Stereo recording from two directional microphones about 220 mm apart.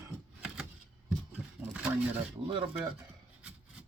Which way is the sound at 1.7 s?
5° right (ahead or behind).